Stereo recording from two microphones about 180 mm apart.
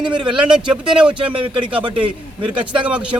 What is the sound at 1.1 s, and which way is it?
Speech, 30° right (ahead or behind).